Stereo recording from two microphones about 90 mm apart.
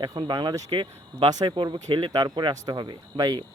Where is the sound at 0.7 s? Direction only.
70° right (ahead or behind).